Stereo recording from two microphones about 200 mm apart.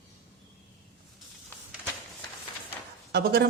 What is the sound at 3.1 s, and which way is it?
Speech, 55° right (ahead or behind).